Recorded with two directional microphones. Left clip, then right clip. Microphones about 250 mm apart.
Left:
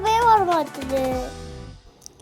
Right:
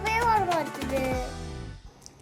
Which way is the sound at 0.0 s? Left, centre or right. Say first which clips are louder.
Left 7 dB; left.